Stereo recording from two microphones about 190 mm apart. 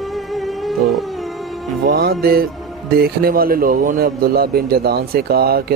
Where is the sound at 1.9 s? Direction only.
55° right (ahead or behind).